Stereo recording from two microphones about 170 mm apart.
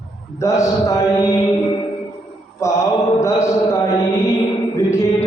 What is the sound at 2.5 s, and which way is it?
Mantra, 15° left (ahead or behind).